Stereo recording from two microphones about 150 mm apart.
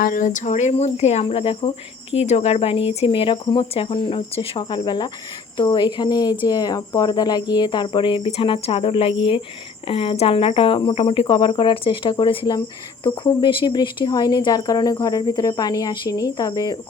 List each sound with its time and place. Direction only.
0.0 s speech: 65° left (ahead or behind); by 1.7 s 40° left (ahead or behind)
2.1 s cricket: 45° left (ahead or behind)
5.5 s speech: 30° left (ahead or behind)
6.4 s cricket: 25° left (ahead or behind)
13.1 s speech: 35° left (ahead or behind)